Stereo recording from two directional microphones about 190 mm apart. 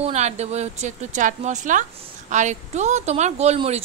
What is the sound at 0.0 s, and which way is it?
Speech, 35° right (ahead or behind).